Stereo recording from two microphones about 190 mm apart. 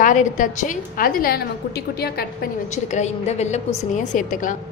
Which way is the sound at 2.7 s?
35° left (ahead or behind).